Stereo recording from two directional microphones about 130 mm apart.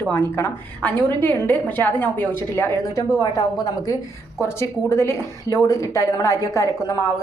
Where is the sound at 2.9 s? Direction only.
25° left (ahead or behind).